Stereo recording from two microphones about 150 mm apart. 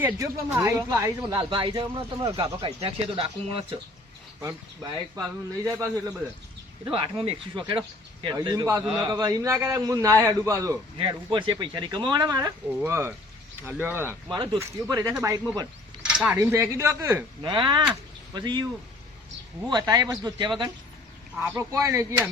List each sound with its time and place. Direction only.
0.0 s speech: 20° right (ahead or behind); by 2.0 s 35° right (ahead or behind)
2.2 s speech: 25° right (ahead or behind)
2.8 s speech: 40° right (ahead or behind)
4.4 s speech: 20° right (ahead or behind)
6.8 s speech: 35° right (ahead or behind)
10.9 s speech: 35° right (ahead or behind)
12.8 s speech: 15° right (ahead or behind)
14.3 s speech: 30° right (ahead or behind)
16.0 s a sound: 5° right (ahead or behind)
16.4 s speech: 20° right (ahead or behind)
17.4 s speech: 30° right (ahead or behind)
21.4 s speech: 20° right (ahead or behind)